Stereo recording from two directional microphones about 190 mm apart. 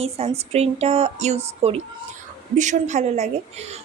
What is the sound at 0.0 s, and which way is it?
A woman's voice, 35° right (ahead or behind).